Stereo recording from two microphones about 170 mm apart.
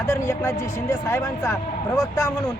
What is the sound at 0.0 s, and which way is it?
A man's voice, 15° left (ahead or behind).